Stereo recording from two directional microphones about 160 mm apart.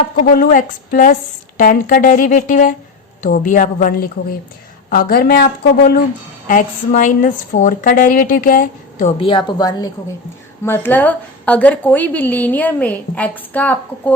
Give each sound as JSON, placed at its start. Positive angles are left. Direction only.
{"t": 0.3, "sound": "a woman's voice", "side_deg": 55}
{"t": 6.5, "sound": "a woman's voice", "side_deg": 55}
{"t": 9.1, "sound": "a woman's voice", "side_deg": 35}
{"t": 10.7, "sound": "a woman's voice", "side_deg": 10}